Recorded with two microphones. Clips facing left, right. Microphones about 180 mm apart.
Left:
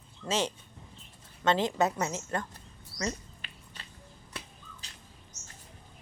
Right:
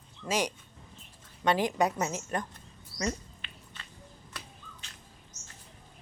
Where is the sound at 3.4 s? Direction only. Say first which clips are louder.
Even; 40° left (ahead or behind).